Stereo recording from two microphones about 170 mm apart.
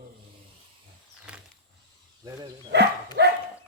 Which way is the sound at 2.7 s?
80° right.